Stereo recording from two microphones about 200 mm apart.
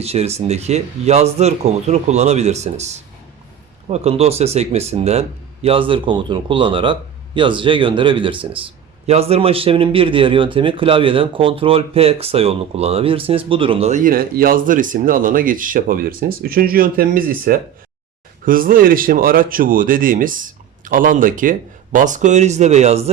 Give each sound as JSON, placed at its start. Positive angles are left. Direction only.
{"t": 0.0, "sound": "speech", "side_deg": -30}